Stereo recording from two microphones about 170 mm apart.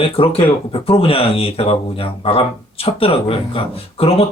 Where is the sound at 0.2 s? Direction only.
35° left (ahead or behind).